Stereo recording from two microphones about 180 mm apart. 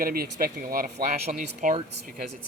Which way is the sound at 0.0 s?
55° right (ahead or behind).